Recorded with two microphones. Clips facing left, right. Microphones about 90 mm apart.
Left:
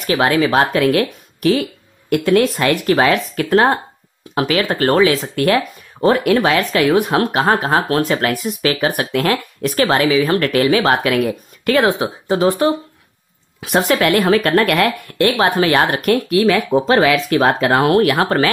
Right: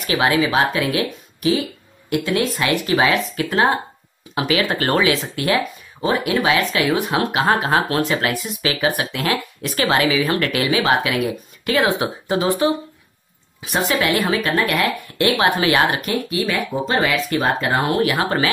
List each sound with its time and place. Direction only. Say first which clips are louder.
0.0 s speech: left 3 dB; 40° left (ahead or behind)
0.8 s speech: left 6 dB; 55° left (ahead or behind); by 5.2 s 35° left (ahead or behind)
5.3 s speech: left 4 dB; 45° left (ahead or behind)
12.0 s speech: left 4 dB; 35° left (ahead or behind)
13.7 s speech: left 5 dB; 50° left (ahead or behind)
14.3 s speech: left 6 dB; 60° left (ahead or behind)
15.1 s speech: left 5 dB; 50° left (ahead or behind)
15.4 s speech: left 1 dB; 40° left (ahead or behind)
16.0 s speech: left 8 dB; 65° left (ahead or behind)
18.1 s speech: left 4 dB; 45° left (ahead or behind)